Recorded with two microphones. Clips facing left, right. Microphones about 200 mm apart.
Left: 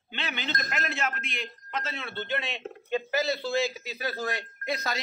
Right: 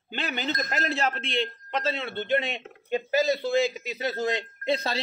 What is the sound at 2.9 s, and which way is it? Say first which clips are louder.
Speech: right 4 dB; 15° right (ahead or behind).